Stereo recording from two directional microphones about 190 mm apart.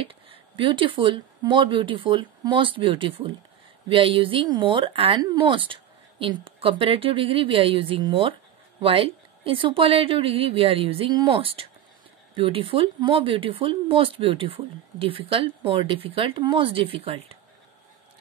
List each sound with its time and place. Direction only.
0.0 s speech: 30° right (ahead or behind)